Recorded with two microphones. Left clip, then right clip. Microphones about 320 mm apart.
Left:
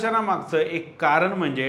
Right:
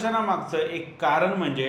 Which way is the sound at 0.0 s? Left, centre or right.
Left.